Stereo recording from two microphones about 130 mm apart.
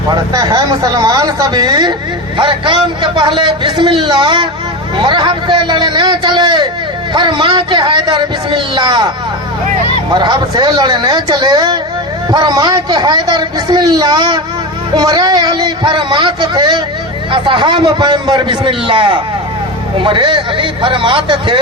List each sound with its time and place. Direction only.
0.1 s speech: 30° right (ahead or behind)
10.2 s speech: 35° right (ahead or behind)